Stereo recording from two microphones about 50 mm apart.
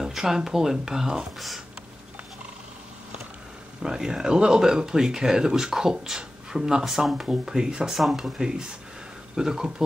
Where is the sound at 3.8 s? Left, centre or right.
Centre.